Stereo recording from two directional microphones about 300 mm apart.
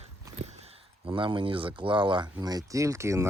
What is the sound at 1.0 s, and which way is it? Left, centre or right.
Speech, centre.